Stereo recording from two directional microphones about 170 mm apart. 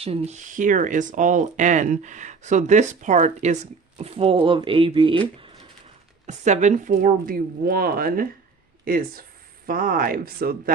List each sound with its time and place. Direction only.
0.0 s speech: 35° right (ahead or behind)
0.5 s speech: 50° right (ahead or behind); by 5.2 s 30° right (ahead or behind)
6.2 s a woman's voice: 45° right (ahead or behind); by 10.6 s 60° right (ahead or behind)